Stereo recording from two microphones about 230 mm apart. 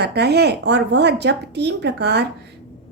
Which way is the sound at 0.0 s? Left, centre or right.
Right.